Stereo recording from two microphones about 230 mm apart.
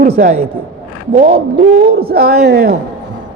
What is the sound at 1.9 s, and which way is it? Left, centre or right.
Speech, right.